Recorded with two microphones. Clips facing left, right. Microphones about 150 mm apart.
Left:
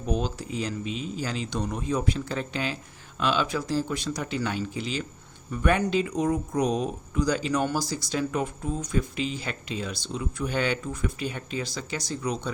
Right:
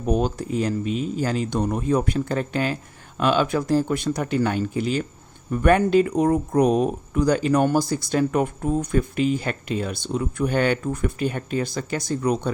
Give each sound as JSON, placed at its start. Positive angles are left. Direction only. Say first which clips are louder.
{"t": 0.0, "sound": "speech", "louder": "right 6 dB", "side_deg": -55}